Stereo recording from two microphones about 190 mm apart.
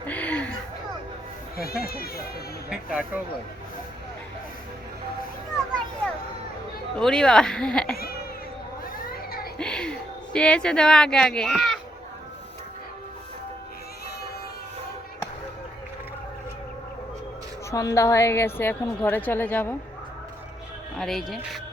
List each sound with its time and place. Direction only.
0.0 s a sound: 10° left (ahead or behind)
1.5 s speech: 50° left (ahead or behind)
2.6 s speech: 5° right (ahead or behind)
6.9 s speech: 5° left (ahead or behind)
9.6 s speech: 5° left (ahead or behind)
17.7 s a woman's voice: 15° left (ahead or behind)
21.0 s speech: centre (ahead or behind)